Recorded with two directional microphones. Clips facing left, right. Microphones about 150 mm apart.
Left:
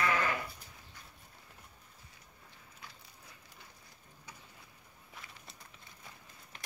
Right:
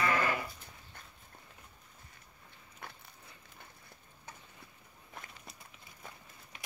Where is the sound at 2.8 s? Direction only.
60° right (ahead or behind).